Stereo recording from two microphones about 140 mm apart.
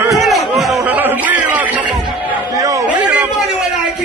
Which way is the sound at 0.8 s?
10° right (ahead or behind).